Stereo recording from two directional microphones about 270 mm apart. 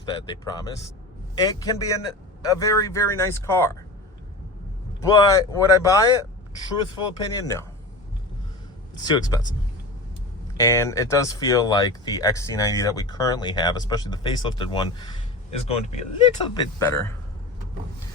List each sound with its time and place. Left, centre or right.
0.0 s speech: centre
4.9 s speech: centre
9.0 s speech: centre
10.6 s speech: centre
16.8 s speech: centre